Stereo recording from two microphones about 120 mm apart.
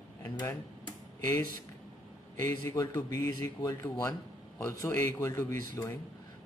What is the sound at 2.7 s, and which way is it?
A man's voice, 25° left (ahead or behind).